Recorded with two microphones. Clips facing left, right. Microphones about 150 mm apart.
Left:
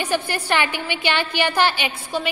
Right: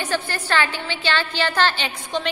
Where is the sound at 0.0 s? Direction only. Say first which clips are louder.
Left 2 dB; 15° left (ahead or behind).